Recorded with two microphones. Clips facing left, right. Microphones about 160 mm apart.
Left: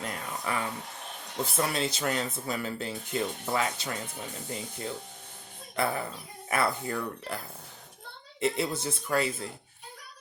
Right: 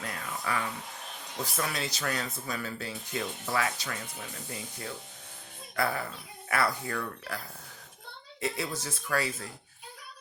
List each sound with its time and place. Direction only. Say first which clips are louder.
0.0 s a sound: left 2 dB; 25° left (ahead or behind)
1.5 s speech: left 5 dB; 25° left (ahead or behind)
8.4 s speech: left 5 dB; 25° left (ahead or behind)